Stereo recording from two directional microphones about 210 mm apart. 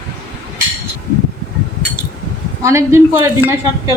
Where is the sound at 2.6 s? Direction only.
15° right (ahead or behind).